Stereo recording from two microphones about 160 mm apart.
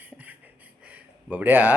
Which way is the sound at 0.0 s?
10° right (ahead or behind).